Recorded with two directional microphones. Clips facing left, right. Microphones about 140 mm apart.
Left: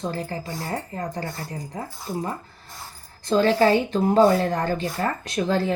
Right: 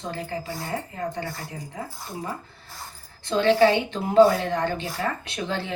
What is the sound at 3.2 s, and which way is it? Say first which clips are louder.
Speech: even; 40° left (ahead or behind).